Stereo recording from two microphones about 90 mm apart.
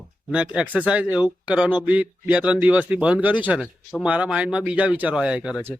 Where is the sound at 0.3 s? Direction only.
10° right (ahead or behind).